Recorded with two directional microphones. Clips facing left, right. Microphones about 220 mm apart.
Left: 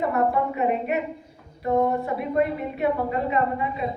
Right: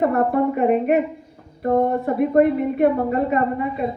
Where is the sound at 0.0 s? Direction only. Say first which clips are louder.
Right 5 dB; 50° right (ahead or behind).